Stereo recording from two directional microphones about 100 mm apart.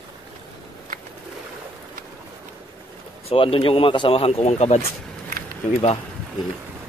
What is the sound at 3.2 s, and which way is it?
Speech, 65° left (ahead or behind).